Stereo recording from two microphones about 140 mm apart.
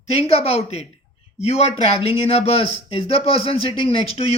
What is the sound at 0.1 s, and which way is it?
Speech, 45° left (ahead or behind).